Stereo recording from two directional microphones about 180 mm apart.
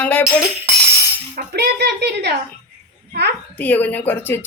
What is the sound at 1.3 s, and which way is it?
A child's voice, 65° right (ahead or behind).